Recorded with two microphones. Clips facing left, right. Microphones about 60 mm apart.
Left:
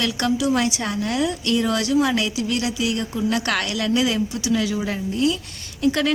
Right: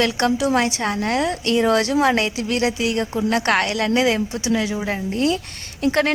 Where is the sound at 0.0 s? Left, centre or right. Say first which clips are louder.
Right 3 dB; right.